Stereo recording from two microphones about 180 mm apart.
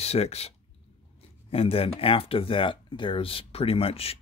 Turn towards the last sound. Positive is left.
turn(degrees=30)  # may be behind; listen again after turning